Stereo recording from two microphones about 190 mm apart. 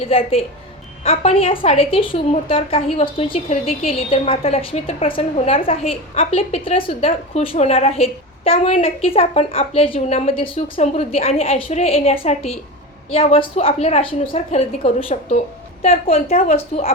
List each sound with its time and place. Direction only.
0.0 s a woman's voice: 30° left (ahead or behind)